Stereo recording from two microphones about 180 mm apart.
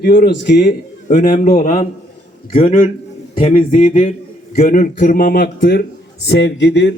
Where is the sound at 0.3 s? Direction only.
70° left (ahead or behind).